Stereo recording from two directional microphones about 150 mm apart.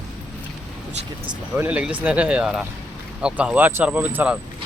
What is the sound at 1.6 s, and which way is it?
Speech, 10° right (ahead or behind).